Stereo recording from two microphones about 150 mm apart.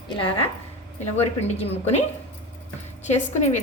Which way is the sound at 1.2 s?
45° left (ahead or behind).